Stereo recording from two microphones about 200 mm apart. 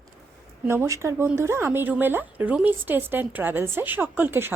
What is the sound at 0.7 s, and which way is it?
Speech, 15° right (ahead or behind).